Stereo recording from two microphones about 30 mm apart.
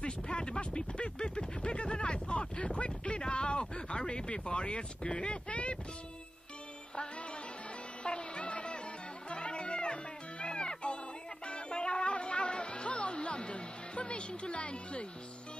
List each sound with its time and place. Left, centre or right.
0.0 s speech: left
8.0 s music: left